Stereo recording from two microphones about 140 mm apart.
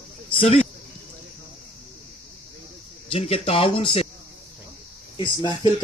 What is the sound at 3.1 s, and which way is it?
Speech, 45° left (ahead or behind).